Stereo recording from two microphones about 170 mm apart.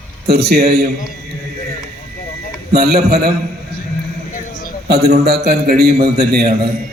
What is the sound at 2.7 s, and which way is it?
Speech, 70° right (ahead or behind).